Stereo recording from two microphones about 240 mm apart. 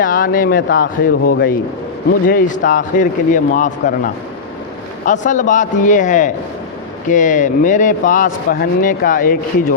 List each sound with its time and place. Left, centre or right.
0.0 s a man's voice: left